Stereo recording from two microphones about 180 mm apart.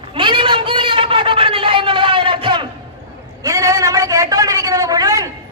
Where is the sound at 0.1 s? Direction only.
25° right (ahead or behind).